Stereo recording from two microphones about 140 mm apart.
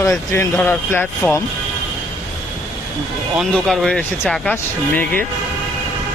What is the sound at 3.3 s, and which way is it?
Speech, centre (ahead or behind).